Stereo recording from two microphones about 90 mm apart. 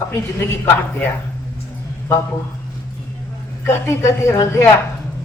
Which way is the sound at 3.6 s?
35° left (ahead or behind).